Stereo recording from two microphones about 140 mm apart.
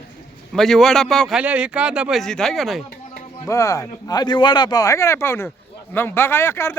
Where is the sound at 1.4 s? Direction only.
10° right (ahead or behind).